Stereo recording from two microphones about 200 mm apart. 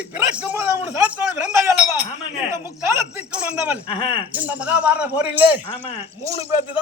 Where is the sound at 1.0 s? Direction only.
5° right (ahead or behind).